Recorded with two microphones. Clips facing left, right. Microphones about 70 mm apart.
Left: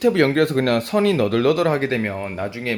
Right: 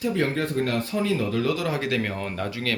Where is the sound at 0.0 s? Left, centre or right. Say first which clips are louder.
Left 9 dB; left.